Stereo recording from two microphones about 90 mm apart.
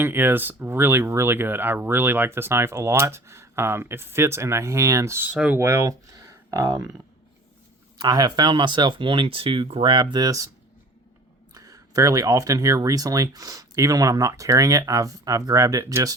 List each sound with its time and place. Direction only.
0.0 s speech: 25° right (ahead or behind)
5.3 s speech: 15° right (ahead or behind)
5.5 s speech: 30° right (ahead or behind)
6.1 s a sound: 35° right (ahead or behind)
6.7 s speech: 45° right (ahead or behind)
7.9 s speech: 50° right (ahead or behind)
11.5 s speech: 40° right (ahead or behind)